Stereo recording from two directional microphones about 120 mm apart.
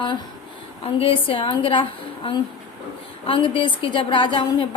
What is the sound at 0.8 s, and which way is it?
A woman's voice, 50° left (ahead or behind).